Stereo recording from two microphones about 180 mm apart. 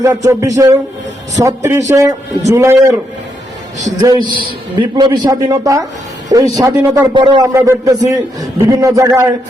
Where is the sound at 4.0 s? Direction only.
20° right (ahead or behind).